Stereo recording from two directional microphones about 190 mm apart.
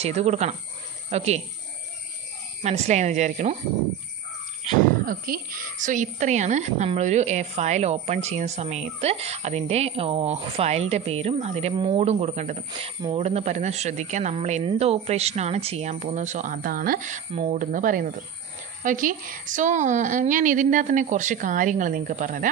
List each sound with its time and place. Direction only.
0.0 s a woman's voice: 35° right (ahead or behind)
2.6 s a woman's voice: 35° right (ahead or behind)
5.0 s a woman's voice: 50° right (ahead or behind)